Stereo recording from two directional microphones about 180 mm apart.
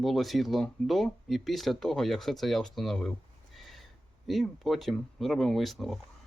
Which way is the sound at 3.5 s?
Centre (ahead or behind).